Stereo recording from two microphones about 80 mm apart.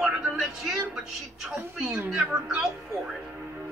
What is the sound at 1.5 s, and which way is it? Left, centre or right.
Speech, right.